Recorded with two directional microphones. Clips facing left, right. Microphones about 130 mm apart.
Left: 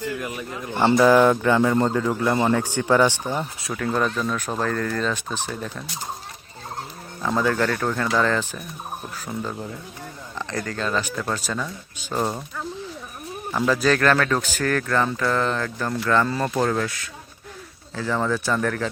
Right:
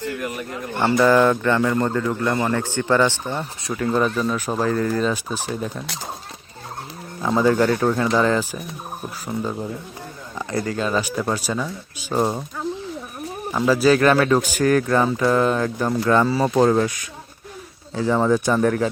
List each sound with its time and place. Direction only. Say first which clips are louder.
0.9 s speech: even; 10° left (ahead or behind)
3.6 s speech: right 5 dB; centre (ahead or behind)
7.2 s speech: right 4 dB; 10° right (ahead or behind)
16.6 s speech: right 7 dB; 20° right (ahead or behind)